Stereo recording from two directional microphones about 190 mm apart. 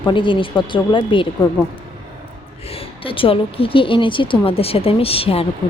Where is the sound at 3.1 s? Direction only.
30° left (ahead or behind).